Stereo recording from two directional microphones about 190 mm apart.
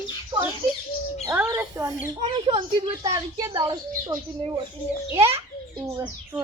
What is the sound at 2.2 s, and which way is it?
Speech, 35° right (ahead or behind).